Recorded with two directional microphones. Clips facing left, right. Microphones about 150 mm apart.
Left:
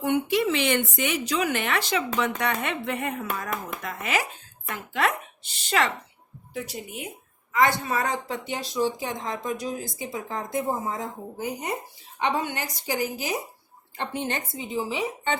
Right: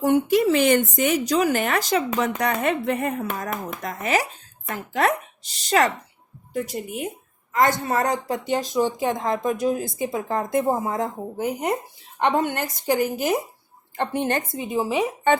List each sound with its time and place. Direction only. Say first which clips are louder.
0.0 s speech: right 5 dB; 40° right (ahead or behind)